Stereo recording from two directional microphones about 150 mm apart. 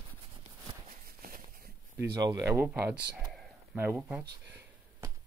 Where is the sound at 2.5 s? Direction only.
15° right (ahead or behind).